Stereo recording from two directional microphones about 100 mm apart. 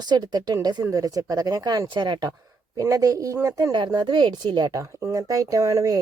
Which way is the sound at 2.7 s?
35° right (ahead or behind).